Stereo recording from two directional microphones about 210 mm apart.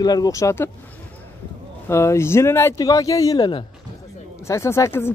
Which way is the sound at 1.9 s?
15° left (ahead or behind).